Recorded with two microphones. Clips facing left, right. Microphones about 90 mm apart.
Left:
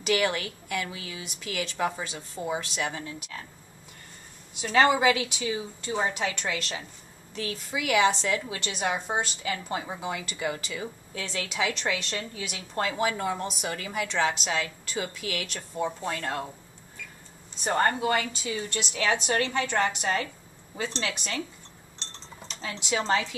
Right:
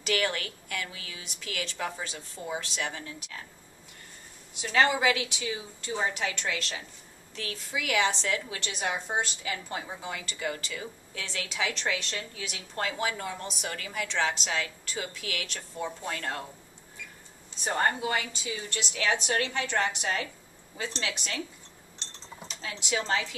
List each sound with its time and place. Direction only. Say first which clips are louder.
0.0 s a woman's voice: left 4 dB; 10° left (ahead or behind)
4.9 s a woman's voice: left 3 dB; centre (ahead or behind)
9.7 s a woman's voice: left 4 dB; 10° left (ahead or behind)
11.1 s a woman's voice: left 3 dB; 5° left (ahead or behind)
13.2 s a woman's voice: left 6 dB; 15° left (ahead or behind)
17.6 s a woman's voice: left 3 dB; centre (ahead or behind)
21.9 s cutlery: left 1 dB; 5° right (ahead or behind)